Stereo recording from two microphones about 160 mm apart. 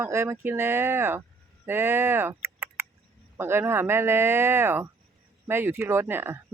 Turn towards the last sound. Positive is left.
turn(degrees=-15)  # may be behind; listen again after turning